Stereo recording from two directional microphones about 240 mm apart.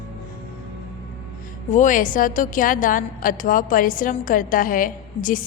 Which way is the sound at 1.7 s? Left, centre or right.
Left.